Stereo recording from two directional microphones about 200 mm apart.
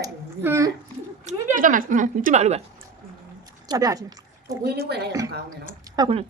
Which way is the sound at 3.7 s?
20° right (ahead or behind).